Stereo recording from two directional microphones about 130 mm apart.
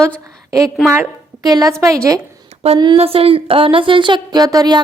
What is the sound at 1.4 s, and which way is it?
Speech, 30° right (ahead or behind).